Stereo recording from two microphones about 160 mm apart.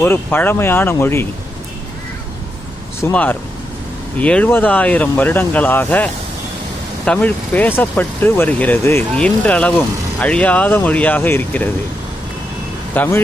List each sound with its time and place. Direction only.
0.0 s speech: 10° left (ahead or behind)
3.0 s speech: 10° left (ahead or behind)
12.9 s speech: 15° left (ahead or behind)